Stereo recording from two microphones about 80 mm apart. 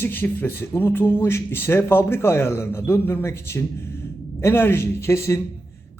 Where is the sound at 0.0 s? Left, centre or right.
Left.